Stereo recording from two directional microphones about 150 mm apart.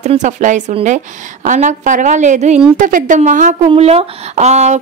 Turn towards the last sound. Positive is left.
turn(degrees=-50)  # may be behind; listen again after turning